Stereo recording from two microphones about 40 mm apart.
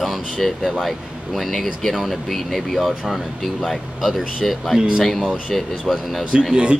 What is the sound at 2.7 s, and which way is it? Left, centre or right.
Speech, centre.